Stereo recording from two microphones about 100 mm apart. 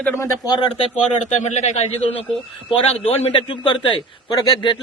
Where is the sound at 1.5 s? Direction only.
90° left.